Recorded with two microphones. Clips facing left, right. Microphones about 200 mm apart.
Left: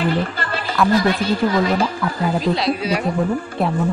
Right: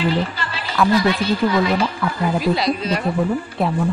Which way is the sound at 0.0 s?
55° left (ahead or behind).